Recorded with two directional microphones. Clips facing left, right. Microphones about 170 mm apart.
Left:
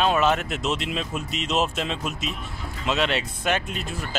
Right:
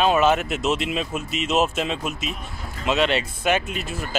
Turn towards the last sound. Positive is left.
turn(degrees=-5)  # may be behind; listen again after turning